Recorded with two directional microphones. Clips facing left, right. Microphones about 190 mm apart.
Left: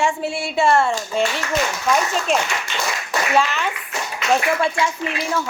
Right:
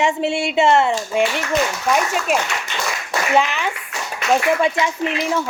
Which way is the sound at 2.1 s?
10° right (ahead or behind).